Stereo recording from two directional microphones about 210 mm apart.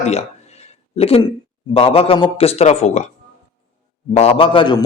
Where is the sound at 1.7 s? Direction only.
25° left (ahead or behind).